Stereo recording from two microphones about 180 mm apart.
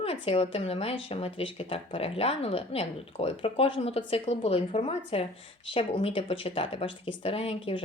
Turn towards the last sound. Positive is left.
turn(degrees=30)  # may be behind; listen again after turning